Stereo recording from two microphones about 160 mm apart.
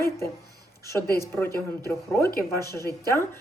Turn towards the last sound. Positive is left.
turn(degrees=15)  # may be behind; listen again after turning